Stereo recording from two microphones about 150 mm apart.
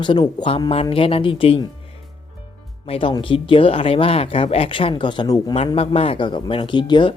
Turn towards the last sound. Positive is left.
turn(degrees=30)  # may be behind; listen again after turning